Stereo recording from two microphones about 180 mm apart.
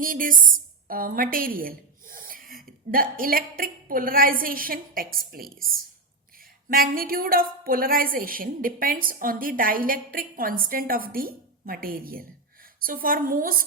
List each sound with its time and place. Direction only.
0.0 s a woman's voice: 50° right (ahead or behind)
6.7 s a woman's voice: 55° right (ahead or behind)